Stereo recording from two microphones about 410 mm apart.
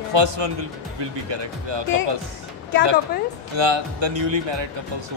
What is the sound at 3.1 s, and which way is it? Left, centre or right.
Speech, left.